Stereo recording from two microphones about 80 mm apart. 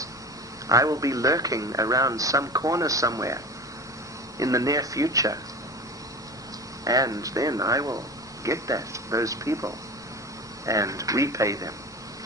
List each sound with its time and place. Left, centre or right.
0.7 s speech: right
6.8 s speech: right